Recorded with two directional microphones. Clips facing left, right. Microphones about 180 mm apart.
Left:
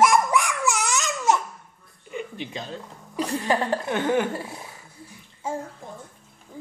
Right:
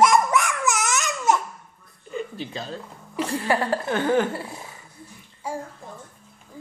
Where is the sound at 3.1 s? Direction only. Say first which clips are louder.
Even; 15° left (ahead or behind).